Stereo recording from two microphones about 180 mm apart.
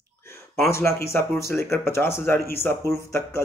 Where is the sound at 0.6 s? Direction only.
15° left (ahead or behind).